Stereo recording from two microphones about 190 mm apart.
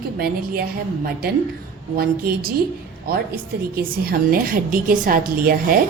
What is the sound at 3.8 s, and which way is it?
A woman's voice, 50° right (ahead or behind).